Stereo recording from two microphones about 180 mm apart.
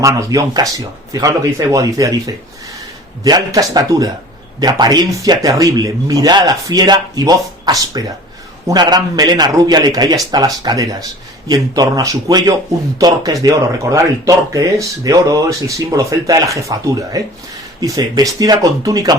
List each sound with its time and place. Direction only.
0.0 s speech: 20° right (ahead or behind)